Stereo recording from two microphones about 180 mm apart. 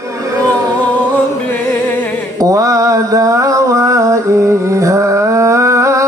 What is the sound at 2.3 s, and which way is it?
Mantra, 20° right (ahead or behind).